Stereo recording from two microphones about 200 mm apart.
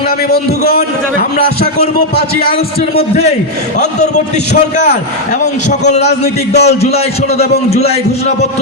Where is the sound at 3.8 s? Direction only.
35° left (ahead or behind).